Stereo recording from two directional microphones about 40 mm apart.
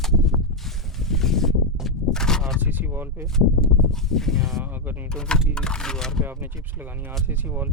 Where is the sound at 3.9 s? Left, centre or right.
Centre.